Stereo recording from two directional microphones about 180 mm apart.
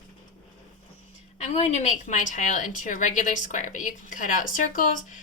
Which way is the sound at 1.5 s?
35° left (ahead or behind).